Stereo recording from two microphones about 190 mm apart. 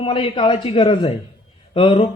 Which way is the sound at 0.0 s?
25° left (ahead or behind).